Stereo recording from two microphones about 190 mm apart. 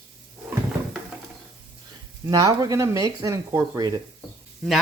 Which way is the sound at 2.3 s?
20° right (ahead or behind).